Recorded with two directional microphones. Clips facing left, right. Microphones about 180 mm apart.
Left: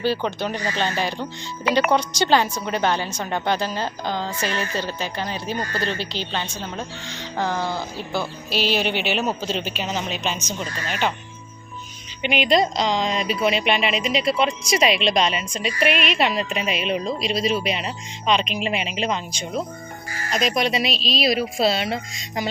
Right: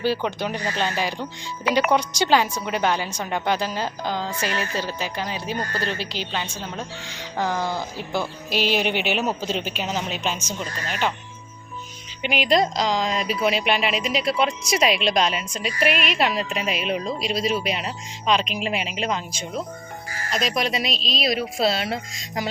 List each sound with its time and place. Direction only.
0.0 s a woman's voice: 10° right (ahead or behind)
8.9 s speech: 50° right (ahead or behind)
9.1 s speech: 10° right (ahead or behind)
12.2 s a woman's voice: 5° right (ahead or behind)